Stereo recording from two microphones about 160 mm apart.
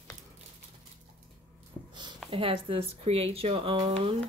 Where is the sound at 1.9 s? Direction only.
30° right (ahead or behind).